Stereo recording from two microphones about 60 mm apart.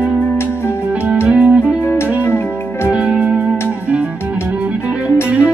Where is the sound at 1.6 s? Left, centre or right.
Left.